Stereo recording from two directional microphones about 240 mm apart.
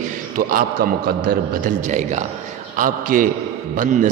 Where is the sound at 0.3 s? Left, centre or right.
Right.